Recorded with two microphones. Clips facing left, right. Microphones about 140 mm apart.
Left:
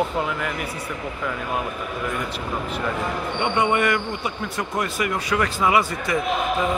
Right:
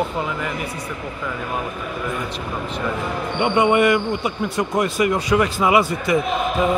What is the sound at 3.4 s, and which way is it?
Speech, 15° right (ahead or behind).